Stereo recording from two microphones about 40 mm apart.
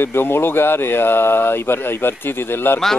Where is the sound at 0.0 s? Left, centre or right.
Left.